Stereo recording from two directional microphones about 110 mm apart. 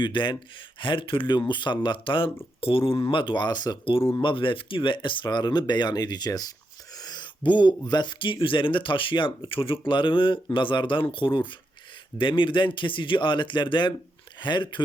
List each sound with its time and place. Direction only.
0.0 s speech: 45° left (ahead or behind)